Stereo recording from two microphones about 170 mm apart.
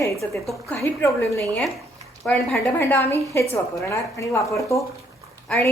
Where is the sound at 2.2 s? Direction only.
5° left (ahead or behind).